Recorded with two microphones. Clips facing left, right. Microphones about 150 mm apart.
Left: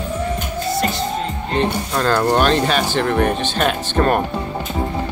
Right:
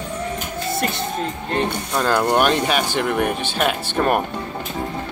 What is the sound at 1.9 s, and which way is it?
Speech, 10° right (ahead or behind).